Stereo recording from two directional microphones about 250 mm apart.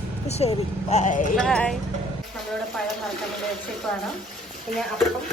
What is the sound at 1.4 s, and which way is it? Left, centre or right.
Speech, centre.